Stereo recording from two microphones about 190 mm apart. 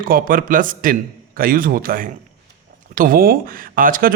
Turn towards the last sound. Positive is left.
turn(degrees=-45)  # may be behind; listen again after turning